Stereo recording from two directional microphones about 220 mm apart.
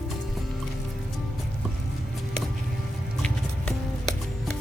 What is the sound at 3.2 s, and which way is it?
Music, 5° left (ahead or behind).